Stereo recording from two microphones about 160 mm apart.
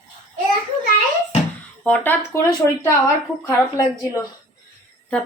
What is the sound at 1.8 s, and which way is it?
A woman's voice, 10° left (ahead or behind).